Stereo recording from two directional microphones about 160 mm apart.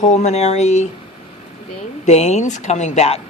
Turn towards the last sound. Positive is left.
turn(degrees=40)  # may be behind; listen again after turning